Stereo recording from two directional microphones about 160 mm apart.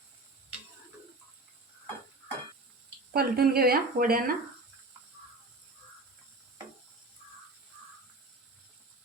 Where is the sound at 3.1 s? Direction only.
75° right (ahead or behind).